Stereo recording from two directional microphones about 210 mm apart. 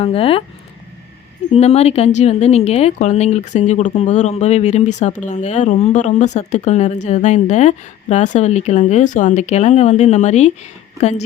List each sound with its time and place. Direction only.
0.0 s speech: 25° left (ahead or behind)
1.5 s a woman's voice: 30° left (ahead or behind)